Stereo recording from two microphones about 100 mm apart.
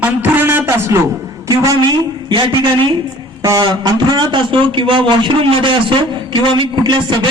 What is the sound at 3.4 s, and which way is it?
Speech, 35° right (ahead or behind).